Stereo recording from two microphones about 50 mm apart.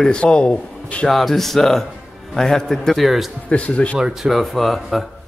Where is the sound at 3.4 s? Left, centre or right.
Left.